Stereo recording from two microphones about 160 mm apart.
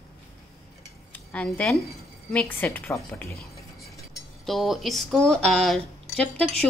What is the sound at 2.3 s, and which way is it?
A woman's voice, 10° left (ahead or behind).